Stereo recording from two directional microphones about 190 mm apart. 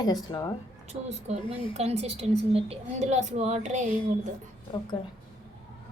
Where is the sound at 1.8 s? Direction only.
35° right (ahead or behind).